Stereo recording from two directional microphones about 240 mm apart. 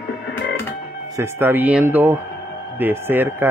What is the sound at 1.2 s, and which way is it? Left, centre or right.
Speech, centre.